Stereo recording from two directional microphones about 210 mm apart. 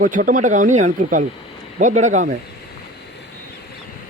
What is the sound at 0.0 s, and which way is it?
A man's voice, 40° right (ahead or behind).